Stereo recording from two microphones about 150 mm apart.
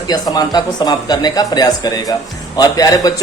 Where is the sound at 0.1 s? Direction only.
30° left (ahead or behind).